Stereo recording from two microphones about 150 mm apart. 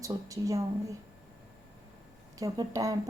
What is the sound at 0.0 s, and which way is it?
Speech, 20° right (ahead or behind).